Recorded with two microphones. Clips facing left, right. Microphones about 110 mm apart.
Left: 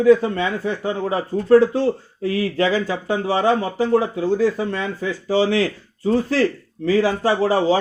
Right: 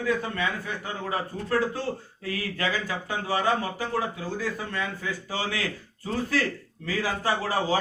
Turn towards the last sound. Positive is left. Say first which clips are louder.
# left 9 dB
turn(degrees=25)  # may be behind; listen again after turning